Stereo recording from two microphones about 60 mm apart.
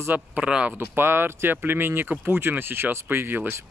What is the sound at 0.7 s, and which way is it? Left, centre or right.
Speech, right.